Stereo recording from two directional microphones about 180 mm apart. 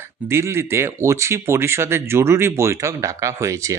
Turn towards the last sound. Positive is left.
turn(degrees=-15)  # may be behind; listen again after turning